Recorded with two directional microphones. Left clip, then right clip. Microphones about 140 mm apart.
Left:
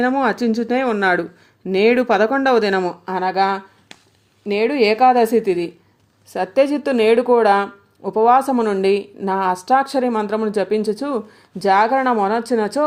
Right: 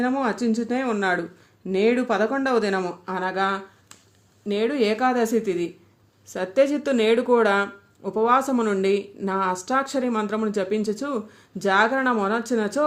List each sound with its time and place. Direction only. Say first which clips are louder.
0.0 s speech: left 6 dB; 30° left (ahead or behind)
6.3 s speech: left 4 dB; 15° left (ahead or behind)